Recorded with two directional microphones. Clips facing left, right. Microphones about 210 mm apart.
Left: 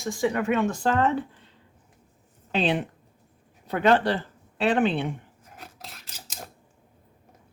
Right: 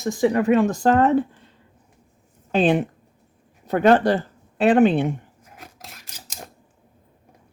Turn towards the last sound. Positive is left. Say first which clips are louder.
# right 1 dB
turn(degrees=-10)  # may be behind; listen again after turning